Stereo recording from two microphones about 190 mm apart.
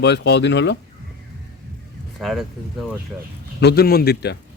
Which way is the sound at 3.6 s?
55° left (ahead or behind).